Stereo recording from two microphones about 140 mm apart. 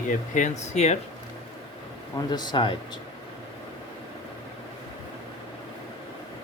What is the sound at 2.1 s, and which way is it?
Speech, 30° left (ahead or behind).